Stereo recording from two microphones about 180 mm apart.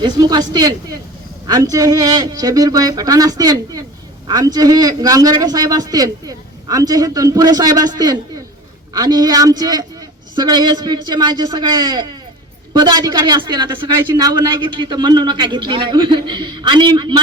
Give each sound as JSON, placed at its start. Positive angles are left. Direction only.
{"t": 0.0, "sound": "a man's voice", "side_deg": -20}